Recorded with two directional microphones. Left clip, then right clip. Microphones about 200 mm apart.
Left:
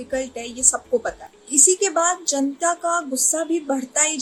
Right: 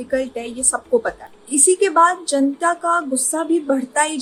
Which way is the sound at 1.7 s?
10° left (ahead or behind).